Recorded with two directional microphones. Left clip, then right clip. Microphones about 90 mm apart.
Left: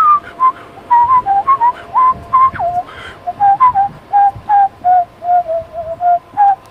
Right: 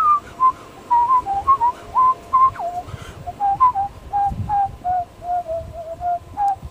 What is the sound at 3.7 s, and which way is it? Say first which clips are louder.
Whistling: left 10 dB; 20° right (ahead or behind).